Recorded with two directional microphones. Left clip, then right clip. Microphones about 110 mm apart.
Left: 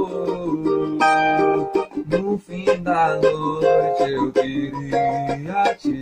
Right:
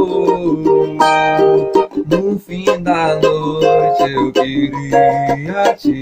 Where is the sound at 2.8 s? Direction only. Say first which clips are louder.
Right 4 dB; 10° right (ahead or behind).